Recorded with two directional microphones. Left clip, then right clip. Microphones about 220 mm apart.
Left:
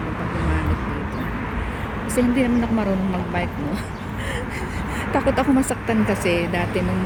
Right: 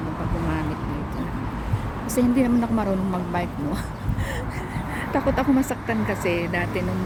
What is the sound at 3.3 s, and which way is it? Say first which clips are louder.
Vehicle: left 2 dB; 10° right (ahead or behind).